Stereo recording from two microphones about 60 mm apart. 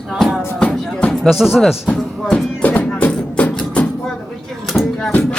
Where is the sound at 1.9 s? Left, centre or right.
Centre.